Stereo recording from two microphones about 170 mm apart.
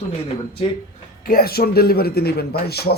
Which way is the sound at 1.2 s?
60° left (ahead or behind).